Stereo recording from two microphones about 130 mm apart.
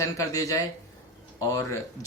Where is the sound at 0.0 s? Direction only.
25° left (ahead or behind).